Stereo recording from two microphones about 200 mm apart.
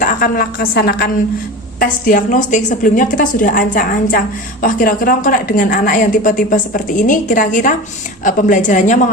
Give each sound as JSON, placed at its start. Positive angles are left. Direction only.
{"t": 0.0, "sound": "a woman's voice", "side_deg": 45}